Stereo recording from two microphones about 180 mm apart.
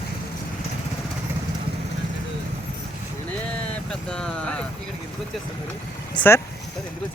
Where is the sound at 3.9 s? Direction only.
5° left (ahead or behind).